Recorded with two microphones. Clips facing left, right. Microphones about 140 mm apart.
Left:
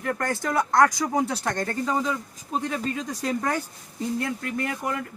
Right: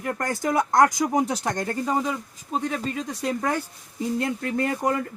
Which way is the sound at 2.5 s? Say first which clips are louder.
Right 1 dB; centre (ahead or behind).